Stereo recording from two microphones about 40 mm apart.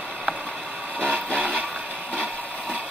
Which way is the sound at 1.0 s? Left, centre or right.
Right.